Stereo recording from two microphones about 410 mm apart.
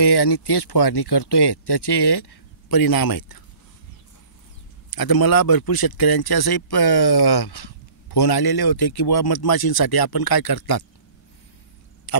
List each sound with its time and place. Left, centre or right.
0.0 s speech: left
4.9 s speech: left
12.1 s vehicle: left